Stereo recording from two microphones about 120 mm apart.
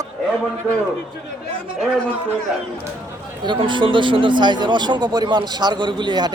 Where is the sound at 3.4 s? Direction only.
40° right (ahead or behind).